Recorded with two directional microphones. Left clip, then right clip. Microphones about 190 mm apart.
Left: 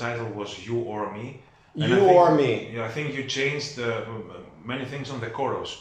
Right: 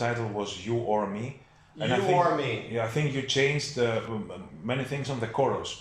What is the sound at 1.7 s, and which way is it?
Speech, 45° left (ahead or behind).